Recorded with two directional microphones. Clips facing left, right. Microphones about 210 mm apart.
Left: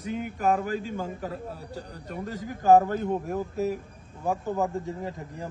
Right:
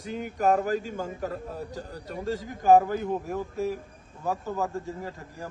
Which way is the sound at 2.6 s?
15° right (ahead or behind).